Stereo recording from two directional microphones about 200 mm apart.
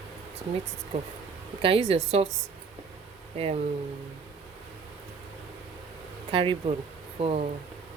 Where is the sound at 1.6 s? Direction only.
30° right (ahead or behind).